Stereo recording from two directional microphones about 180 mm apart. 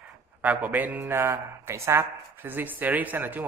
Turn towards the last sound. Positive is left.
turn(degrees=-10)  # may be behind; listen again after turning